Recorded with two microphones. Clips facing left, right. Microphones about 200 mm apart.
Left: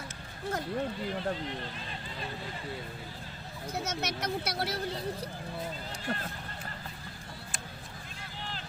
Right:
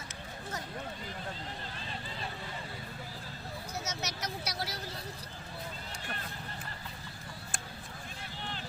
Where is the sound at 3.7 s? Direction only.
55° left (ahead or behind).